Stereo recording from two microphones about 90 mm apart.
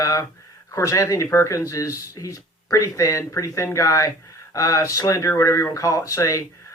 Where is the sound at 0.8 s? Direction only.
40° left (ahead or behind).